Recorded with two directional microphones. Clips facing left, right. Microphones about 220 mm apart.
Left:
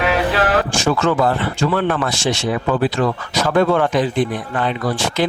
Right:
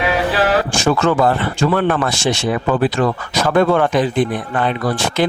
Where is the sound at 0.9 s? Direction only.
50° right (ahead or behind).